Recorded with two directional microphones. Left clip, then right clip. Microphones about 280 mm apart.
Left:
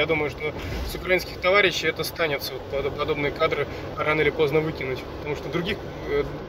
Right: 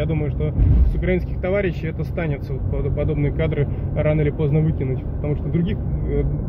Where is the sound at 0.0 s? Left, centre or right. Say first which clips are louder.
Left 2 dB; centre.